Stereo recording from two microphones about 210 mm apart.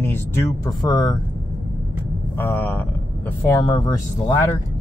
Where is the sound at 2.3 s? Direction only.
10° left (ahead or behind).